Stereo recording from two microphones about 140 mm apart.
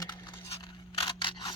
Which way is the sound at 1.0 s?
35° left (ahead or behind).